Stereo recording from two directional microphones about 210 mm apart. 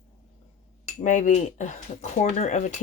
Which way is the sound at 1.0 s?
35° left (ahead or behind).